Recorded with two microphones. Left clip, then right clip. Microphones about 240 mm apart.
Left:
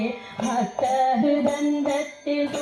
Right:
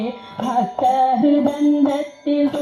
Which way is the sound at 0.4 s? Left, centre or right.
Right.